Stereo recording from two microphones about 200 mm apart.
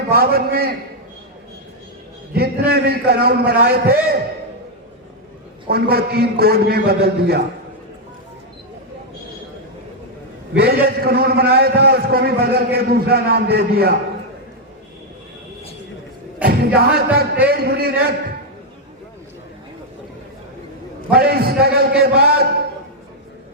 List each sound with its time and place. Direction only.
0.1 s a man's voice: 50° right (ahead or behind)
2.3 s a man's voice: 50° right (ahead or behind)
5.6 s a man's voice: 50° right (ahead or behind)
10.6 s a man's voice: 50° right (ahead or behind)
16.4 s a man's voice: 50° right (ahead or behind)
21.1 s a man's voice: 50° right (ahead or behind)